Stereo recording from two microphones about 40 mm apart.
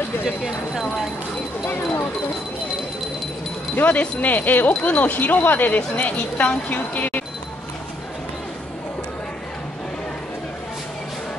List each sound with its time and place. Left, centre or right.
0.5 s speech: centre
3.8 s speech: left